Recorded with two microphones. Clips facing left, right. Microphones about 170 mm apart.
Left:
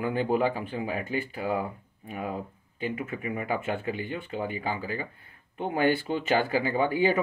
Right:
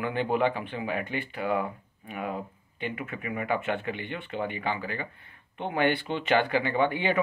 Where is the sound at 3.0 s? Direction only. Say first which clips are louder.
Left 1 dB; 30° left (ahead or behind).